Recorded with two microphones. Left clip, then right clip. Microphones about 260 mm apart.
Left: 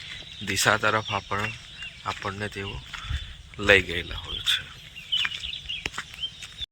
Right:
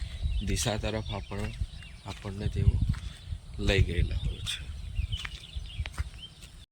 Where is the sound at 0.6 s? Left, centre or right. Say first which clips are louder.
Left 12 dB; left.